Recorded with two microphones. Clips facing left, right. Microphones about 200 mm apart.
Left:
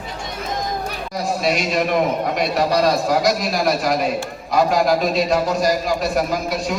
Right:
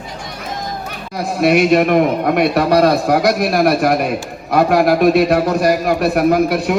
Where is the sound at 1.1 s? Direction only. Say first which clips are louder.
Right 7 dB; 60° right (ahead or behind).